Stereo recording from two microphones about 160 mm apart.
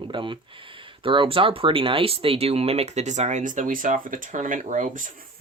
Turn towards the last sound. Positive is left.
turn(degrees=-50)  # may be behind; listen again after turning